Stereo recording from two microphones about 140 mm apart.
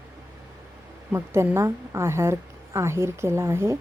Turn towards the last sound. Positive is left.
turn(degrees=-20)  # may be behind; listen again after turning